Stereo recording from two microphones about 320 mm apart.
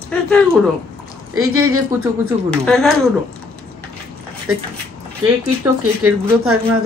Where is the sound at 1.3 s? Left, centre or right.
Right.